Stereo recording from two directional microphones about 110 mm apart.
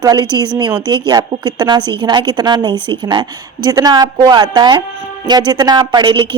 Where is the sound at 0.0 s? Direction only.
35° right (ahead or behind).